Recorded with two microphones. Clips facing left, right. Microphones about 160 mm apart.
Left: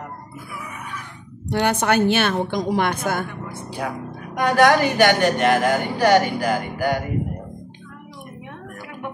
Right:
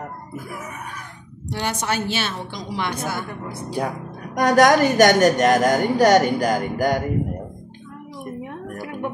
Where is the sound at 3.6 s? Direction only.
40° right (ahead or behind).